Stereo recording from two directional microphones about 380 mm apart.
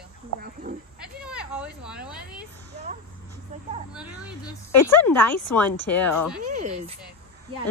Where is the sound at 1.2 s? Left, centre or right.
Centre.